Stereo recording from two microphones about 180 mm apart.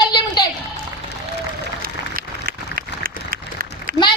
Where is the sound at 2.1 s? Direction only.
55° right (ahead or behind).